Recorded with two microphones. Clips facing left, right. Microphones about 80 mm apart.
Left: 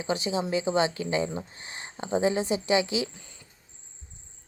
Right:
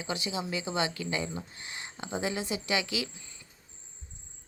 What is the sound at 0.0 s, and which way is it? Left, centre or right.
Speech, left.